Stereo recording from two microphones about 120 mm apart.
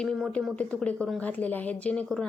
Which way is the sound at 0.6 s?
10° left (ahead or behind).